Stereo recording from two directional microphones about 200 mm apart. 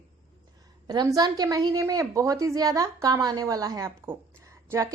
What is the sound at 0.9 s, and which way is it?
A woman's voice, 20° right (ahead or behind).